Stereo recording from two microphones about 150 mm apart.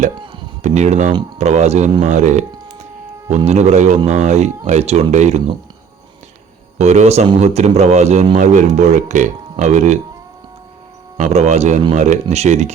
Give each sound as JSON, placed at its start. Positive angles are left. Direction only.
{"t": 0.6, "sound": "speech", "side_deg": -50}
{"t": 6.7, "sound": "speech", "side_deg": -50}
{"t": 11.2, "sound": "speech", "side_deg": -45}